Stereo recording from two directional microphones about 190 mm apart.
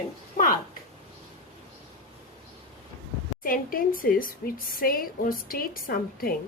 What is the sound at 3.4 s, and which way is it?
A woman's voice, 50° left (ahead or behind).